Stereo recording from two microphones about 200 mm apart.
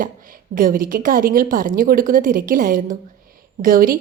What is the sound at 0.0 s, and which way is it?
A woman's voice, 45° right (ahead or behind).